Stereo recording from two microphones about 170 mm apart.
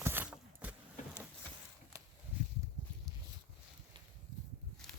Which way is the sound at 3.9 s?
30° right (ahead or behind).